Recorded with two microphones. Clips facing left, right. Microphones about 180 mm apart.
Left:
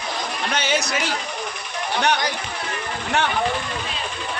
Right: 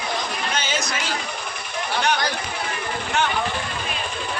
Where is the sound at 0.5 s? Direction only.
65° left (ahead or behind).